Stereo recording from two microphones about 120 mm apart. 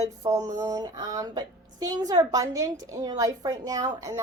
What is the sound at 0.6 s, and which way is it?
A woman's voice, 30° right (ahead or behind).